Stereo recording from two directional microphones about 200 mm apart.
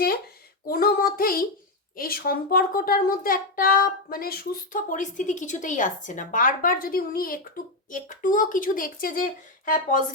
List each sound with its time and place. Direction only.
0.7 s speech: 50° left (ahead or behind)